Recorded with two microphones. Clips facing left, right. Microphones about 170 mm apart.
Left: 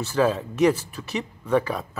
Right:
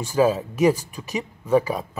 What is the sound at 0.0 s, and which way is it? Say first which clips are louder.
Speech: right 2 dB; 10° right (ahead or behind).